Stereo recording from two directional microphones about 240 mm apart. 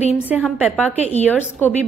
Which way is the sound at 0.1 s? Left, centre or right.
Centre.